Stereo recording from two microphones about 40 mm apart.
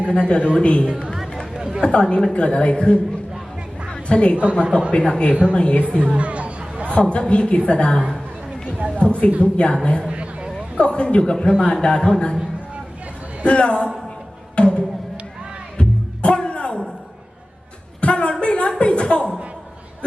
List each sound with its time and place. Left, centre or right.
0.1 s a man's voice: left
1.5 s chatter: centre
1.8 s a woman's voice: left
3.8 s a sound: left
4.9 s a woman's voice: left
6.1 s a sound: right
6.9 s a woman's voice: left
10.1 s a sound: right
10.8 s a woman's voice: left
13.4 s a woman's voice: left
14.5 s music: left
18.0 s a sound: left